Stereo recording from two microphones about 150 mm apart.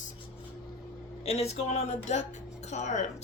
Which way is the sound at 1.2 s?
45° left (ahead or behind).